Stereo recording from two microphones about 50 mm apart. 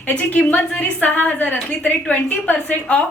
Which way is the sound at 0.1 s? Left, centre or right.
Left.